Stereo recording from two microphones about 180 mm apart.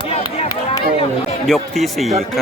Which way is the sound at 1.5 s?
Centre (ahead or behind).